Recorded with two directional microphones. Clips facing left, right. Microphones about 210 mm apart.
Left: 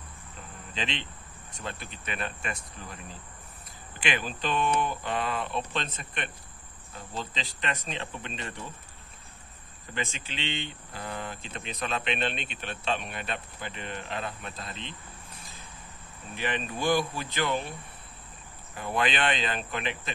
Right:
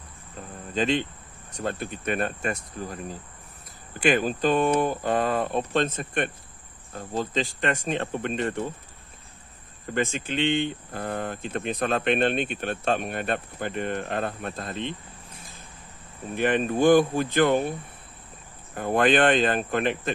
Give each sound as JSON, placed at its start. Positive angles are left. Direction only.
{"t": 0.7, "sound": "speech", "side_deg": -45}
{"t": 9.9, "sound": "speech", "side_deg": -50}
{"t": 16.3, "sound": "speech", "side_deg": -50}
{"t": 18.8, "sound": "speech", "side_deg": -50}